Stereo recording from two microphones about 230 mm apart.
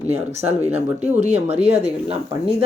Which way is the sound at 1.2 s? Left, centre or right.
Right.